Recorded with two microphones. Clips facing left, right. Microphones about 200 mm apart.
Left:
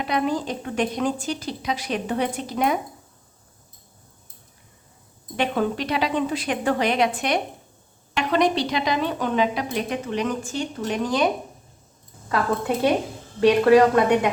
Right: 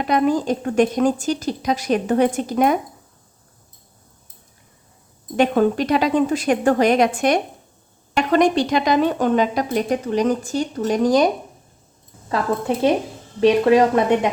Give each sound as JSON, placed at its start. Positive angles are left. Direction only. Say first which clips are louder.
{"t": 0.0, "sound": "a woman's voice", "louder": "right 6 dB", "side_deg": -45}
{"t": 5.4, "sound": "a woman's voice", "louder": "right 7 dB", "side_deg": -45}
{"t": 12.3, "sound": "a woman's voice", "louder": "right 2 dB", "side_deg": -25}